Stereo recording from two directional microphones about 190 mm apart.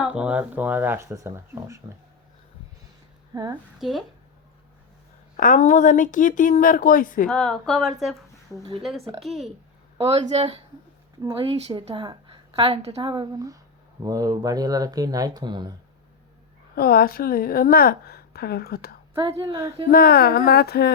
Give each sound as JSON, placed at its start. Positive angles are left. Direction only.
{"t": 0.0, "sound": "speech", "side_deg": -5}
{"t": 3.3, "sound": "a woman's voice", "side_deg": -20}
{"t": 3.8, "sound": "a woman's voice", "side_deg": 0}
{"t": 5.4, "sound": "a woman's voice", "side_deg": 40}
{"t": 7.3, "sound": "a woman's voice", "side_deg": 5}
{"t": 9.0, "sound": "speech", "side_deg": -30}
{"t": 9.2, "sound": "a woman's voice", "side_deg": 0}
{"t": 10.0, "sound": "speech", "side_deg": -30}
{"t": 11.2, "sound": "a woman's voice", "side_deg": -20}
{"t": 11.4, "sound": "a woman's voice", "side_deg": -30}
{"t": 16.7, "sound": "a woman's voice", "side_deg": 55}
{"t": 19.2, "sound": "a woman's voice", "side_deg": -30}
{"t": 19.9, "sound": "a woman's voice", "side_deg": 50}